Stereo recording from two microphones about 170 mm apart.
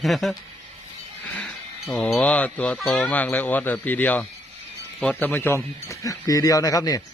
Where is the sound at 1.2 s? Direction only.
10° left (ahead or behind).